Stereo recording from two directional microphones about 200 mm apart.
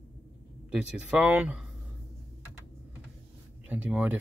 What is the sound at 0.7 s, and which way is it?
Speech, 5° right (ahead or behind).